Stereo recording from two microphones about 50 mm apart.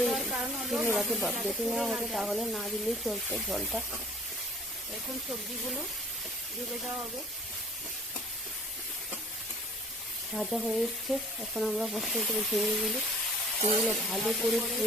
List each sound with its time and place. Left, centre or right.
0.1 s hiss: centre
0.9 s speech: centre
10.3 s speech: centre